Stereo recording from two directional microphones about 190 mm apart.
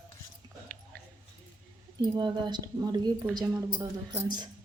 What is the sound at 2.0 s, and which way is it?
Speech, 25° right (ahead or behind).